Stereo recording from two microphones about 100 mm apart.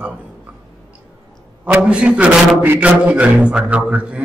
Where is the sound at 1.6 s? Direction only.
10° right (ahead or behind).